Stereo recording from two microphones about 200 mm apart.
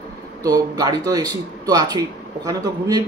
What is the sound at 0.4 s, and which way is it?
A man's voice, 20° right (ahead or behind).